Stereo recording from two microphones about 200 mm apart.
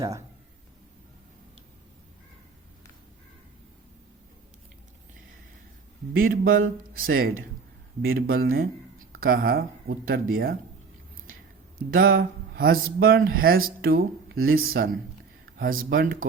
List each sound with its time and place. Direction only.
0.0 s speech: 15° right (ahead or behind)
6.1 s speech: 45° right (ahead or behind)
11.8 s speech: 45° right (ahead or behind)